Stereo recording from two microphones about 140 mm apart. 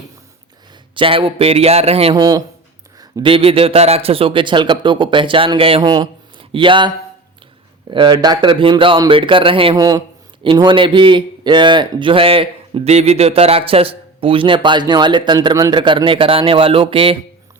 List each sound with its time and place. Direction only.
0.9 s speech: 40° right (ahead or behind)
2.1 s speech: 25° right (ahead or behind)
3.2 s speech: 40° right (ahead or behind)
9.7 s speech: 25° right (ahead or behind)